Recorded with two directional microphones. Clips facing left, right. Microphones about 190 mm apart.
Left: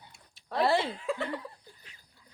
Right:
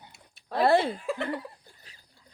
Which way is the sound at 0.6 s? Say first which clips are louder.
Right 5 dB; 55° right (ahead or behind).